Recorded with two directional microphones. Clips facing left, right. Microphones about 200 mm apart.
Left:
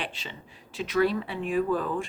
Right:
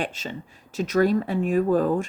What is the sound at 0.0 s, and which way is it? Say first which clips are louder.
A woman's voice: right 7 dB; 45° right (ahead or behind).